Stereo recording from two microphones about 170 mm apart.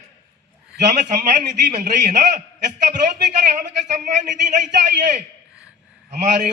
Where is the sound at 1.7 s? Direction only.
45° right (ahead or behind).